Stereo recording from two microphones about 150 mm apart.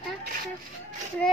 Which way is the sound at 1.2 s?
10° left (ahead or behind).